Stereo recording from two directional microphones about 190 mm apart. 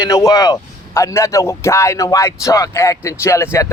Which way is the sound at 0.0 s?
15° left (ahead or behind).